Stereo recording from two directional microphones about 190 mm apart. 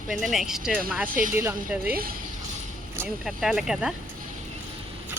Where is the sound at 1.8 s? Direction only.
50° right (ahead or behind).